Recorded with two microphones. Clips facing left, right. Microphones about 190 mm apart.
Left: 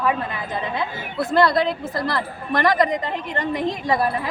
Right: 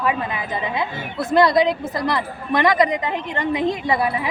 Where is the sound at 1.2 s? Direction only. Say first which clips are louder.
Right 2 dB; 20° right (ahead or behind).